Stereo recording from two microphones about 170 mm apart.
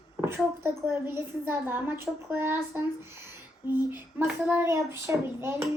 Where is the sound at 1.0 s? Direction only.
15° right (ahead or behind).